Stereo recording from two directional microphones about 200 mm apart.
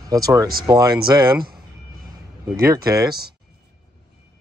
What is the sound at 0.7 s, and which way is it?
Speech, 20° right (ahead or behind).